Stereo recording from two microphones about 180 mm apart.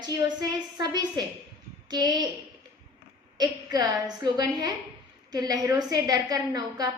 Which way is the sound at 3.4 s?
20° right (ahead or behind).